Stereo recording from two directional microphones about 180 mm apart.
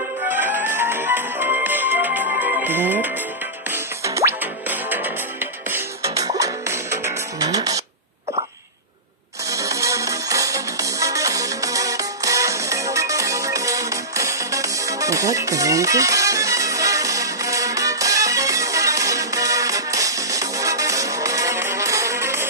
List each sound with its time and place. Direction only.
0.3 s music: 10° right (ahead or behind)
9.5 s music: 15° right (ahead or behind)